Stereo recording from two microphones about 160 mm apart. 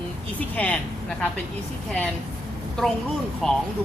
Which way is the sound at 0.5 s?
10° left (ahead or behind).